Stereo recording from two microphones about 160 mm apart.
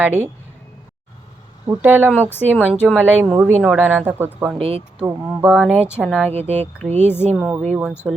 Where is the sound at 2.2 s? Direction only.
10° left (ahead or behind).